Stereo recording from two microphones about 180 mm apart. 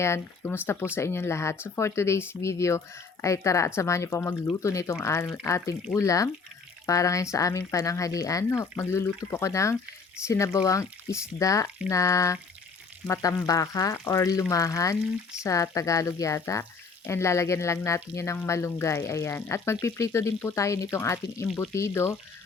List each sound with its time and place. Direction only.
0.0 s speech: 15° left (ahead or behind)